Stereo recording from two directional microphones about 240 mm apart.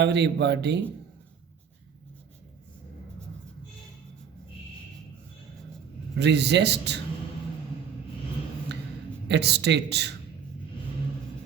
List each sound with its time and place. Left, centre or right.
0.0 s a man's voice: right
6.1 s a man's voice: right
9.3 s a man's voice: right